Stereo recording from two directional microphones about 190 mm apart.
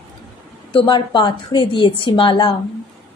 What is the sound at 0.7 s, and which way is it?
A woman's voice, 25° left (ahead or behind).